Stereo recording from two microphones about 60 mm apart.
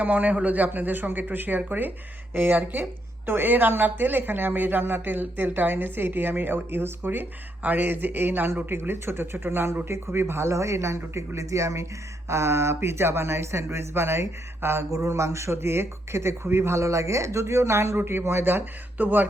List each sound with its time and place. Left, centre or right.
0.0 s a woman's voice: right
14.8 s a man's voice: right